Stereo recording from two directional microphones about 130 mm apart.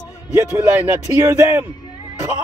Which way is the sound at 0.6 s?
15° right (ahead or behind).